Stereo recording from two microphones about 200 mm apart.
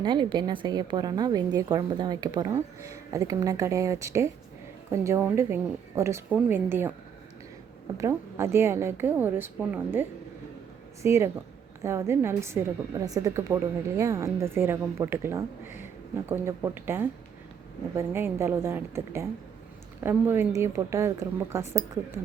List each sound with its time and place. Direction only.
0.0 s a woman's voice: 20° right (ahead or behind)
7.9 s a woman's voice: 15° right (ahead or behind)